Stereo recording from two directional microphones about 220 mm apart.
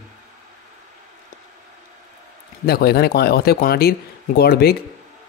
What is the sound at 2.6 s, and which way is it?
Speech, 45° left (ahead or behind).